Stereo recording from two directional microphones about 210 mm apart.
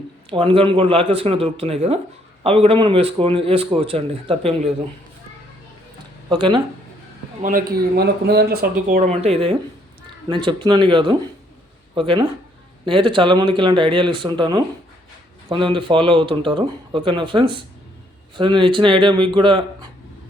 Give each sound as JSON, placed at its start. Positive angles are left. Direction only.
{"t": 0.3, "sound": "a man's voice", "side_deg": -25}
{"t": 6.2, "sound": "speech", "side_deg": -20}
{"t": 7.4, "sound": "a man's voice", "side_deg": -45}